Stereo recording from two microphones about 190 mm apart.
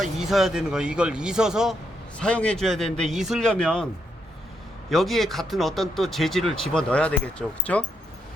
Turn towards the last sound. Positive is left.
turn(degrees=5)  # may be behind; listen again after turning